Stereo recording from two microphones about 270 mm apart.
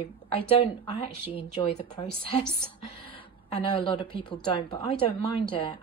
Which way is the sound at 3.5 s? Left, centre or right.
Centre.